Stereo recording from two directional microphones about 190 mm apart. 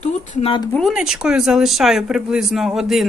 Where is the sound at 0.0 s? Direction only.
35° left (ahead or behind).